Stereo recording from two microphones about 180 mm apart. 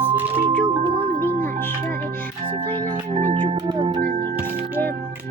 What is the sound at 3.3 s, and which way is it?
Music, 25° right (ahead or behind).